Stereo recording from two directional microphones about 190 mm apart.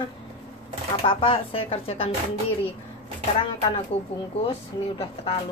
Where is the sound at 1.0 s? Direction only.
30° left (ahead or behind).